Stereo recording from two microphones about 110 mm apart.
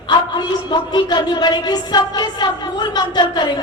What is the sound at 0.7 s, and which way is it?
Speech, 45° left (ahead or behind).